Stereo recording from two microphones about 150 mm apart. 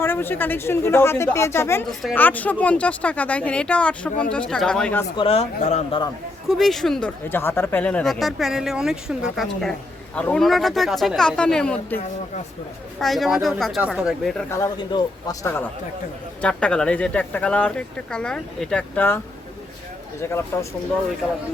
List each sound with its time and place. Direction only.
0.0 s speech: 15° left (ahead or behind)
1.9 s speech: centre (ahead or behind)
2.1 s speech: 10° left (ahead or behind)
5.1 s speech: 40° left (ahead or behind)
6.5 s speech: centre (ahead or behind)
7.3 s speech: 15° left (ahead or behind)
13.0 s speech: centre (ahead or behind)
14.8 s speech: 30° left (ahead or behind)
16.4 s speech: 5° left (ahead or behind)
20.2 s speech: 15° left (ahead or behind)